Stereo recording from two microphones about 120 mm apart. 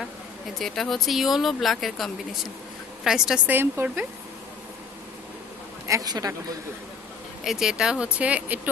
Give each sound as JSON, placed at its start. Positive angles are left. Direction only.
{"t": 0.6, "sound": "a woman's voice", "side_deg": 5}
{"t": 3.4, "sound": "speech", "side_deg": -15}
{"t": 5.9, "sound": "speech", "side_deg": -30}
{"t": 7.4, "sound": "speech", "side_deg": -5}